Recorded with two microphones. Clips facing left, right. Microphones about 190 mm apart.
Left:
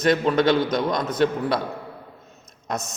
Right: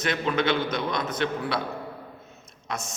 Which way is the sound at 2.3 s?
40° left (ahead or behind).